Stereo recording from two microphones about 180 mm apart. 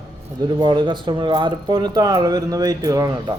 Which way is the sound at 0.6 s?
25° right (ahead or behind).